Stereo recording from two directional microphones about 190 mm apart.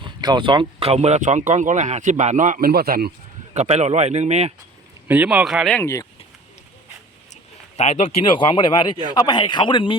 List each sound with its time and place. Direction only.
0.0 s speech: 25° right (ahead or behind); by 3.1 s 55° right (ahead or behind)
3.5 s speech: 35° right (ahead or behind)
5.0 s speech: 10° right (ahead or behind); by 6.1 s 15° left (ahead or behind)
7.8 s speech: 35° left (ahead or behind)